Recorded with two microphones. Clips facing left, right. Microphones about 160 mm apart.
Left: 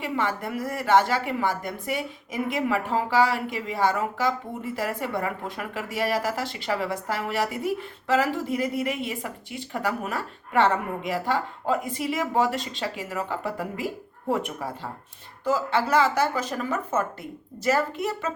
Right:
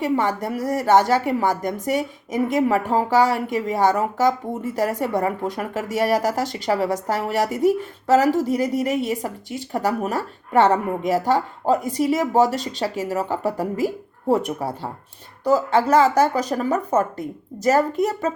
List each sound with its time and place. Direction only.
0.0 s a woman's voice: 40° right (ahead or behind)